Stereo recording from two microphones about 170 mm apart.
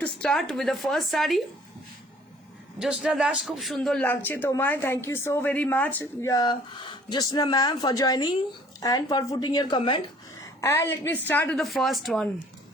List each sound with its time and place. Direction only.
0.0 s speech: 5° left (ahead or behind)
2.8 s a man's voice: 5° right (ahead or behind); by 10.0 s 25° left (ahead or behind)
10.6 s a man's voice: 15° left (ahead or behind)